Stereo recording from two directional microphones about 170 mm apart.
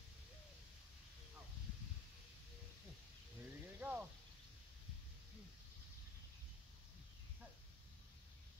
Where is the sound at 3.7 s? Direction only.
10° right (ahead or behind).